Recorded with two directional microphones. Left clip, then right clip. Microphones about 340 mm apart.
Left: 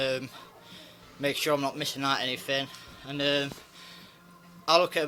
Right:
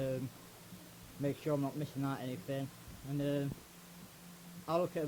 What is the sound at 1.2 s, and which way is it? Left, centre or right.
Speech, centre.